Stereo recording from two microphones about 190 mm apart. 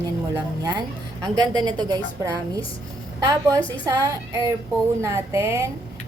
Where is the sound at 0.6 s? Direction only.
20° right (ahead or behind).